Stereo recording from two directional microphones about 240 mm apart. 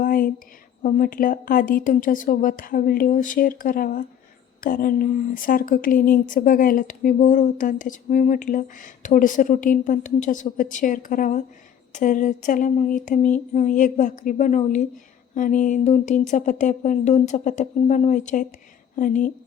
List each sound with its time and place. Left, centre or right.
0.0 s speech: left